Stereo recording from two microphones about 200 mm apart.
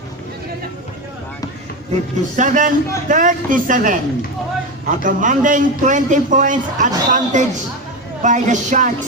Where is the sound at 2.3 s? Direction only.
40° right (ahead or behind).